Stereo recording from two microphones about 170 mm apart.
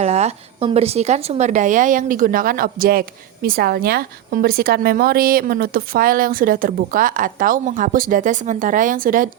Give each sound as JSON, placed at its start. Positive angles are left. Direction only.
{"t": 0.0, "sound": "a woman's voice", "side_deg": -40}